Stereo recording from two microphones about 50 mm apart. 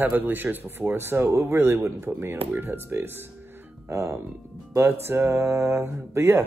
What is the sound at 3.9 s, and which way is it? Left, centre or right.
Speech, right.